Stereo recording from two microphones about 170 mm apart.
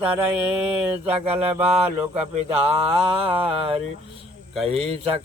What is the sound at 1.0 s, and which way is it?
Speech, 35° right (ahead or behind).